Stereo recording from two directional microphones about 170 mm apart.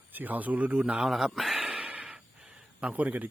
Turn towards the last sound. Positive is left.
turn(degrees=-10)  # may be behind; listen again after turning